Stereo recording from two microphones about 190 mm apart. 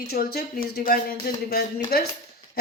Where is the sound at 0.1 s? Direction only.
55° left (ahead or behind).